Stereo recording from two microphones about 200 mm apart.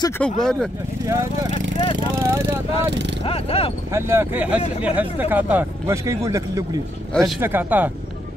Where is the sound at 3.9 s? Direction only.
10° right (ahead or behind).